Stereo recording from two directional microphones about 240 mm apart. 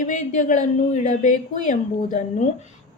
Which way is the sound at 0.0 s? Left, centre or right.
Left.